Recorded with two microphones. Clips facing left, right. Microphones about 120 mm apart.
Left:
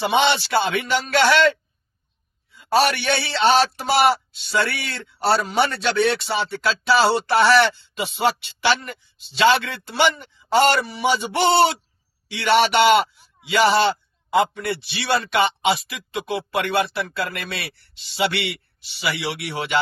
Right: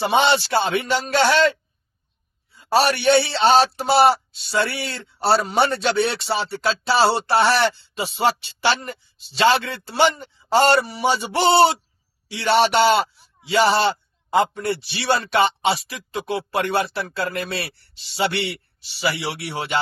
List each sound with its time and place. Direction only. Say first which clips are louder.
0.0 s a man's voice: right 1 dB; 30° right (ahead or behind)
2.6 s a man's voice: even; 35° right (ahead or behind)